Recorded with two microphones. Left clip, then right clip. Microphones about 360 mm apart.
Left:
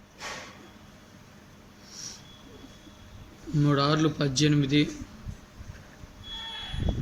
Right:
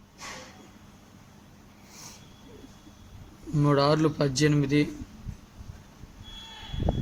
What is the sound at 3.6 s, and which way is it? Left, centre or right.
Speech, centre.